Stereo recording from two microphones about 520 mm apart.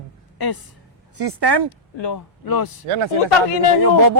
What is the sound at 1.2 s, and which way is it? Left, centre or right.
Speech, right.